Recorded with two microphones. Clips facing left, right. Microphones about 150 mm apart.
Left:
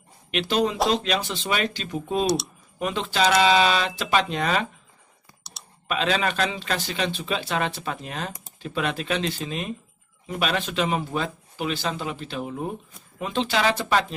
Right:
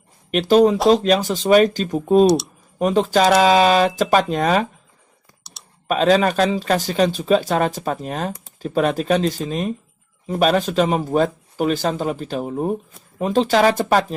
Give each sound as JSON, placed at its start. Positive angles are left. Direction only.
{"t": 0.3, "sound": "speech", "side_deg": -40}
{"t": 2.2, "sound": "speech", "side_deg": 0}
{"t": 2.7, "sound": "speech", "side_deg": -40}
{"t": 5.4, "sound": "clicking", "side_deg": 0}
{"t": 5.9, "sound": "speech", "side_deg": -40}